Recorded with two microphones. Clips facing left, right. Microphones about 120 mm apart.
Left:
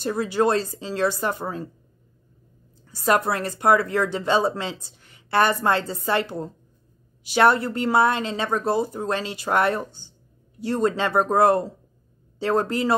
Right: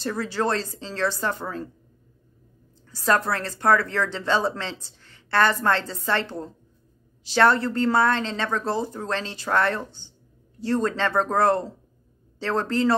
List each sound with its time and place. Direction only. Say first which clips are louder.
0.0 s a woman's voice: left 4 dB; 15° left (ahead or behind)
2.9 s a woman's voice: left 2 dB; 15° left (ahead or behind)